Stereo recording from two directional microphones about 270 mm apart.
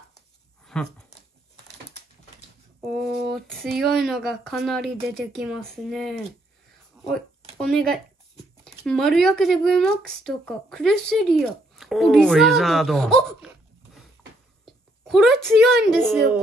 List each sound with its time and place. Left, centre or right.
0.7 s speech: centre
2.8 s speech: centre
7.0 s a sound: centre
7.6 s speech: centre
14.6 s a sound: centre
16.1 s speech: centre